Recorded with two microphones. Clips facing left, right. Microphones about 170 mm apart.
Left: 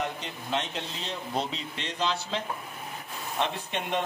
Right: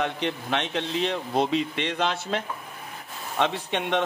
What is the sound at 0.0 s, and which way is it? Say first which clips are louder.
Speech: right 6 dB; 70° right (ahead or behind).